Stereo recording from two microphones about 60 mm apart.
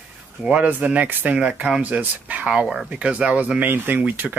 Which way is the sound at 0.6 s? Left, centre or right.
Right.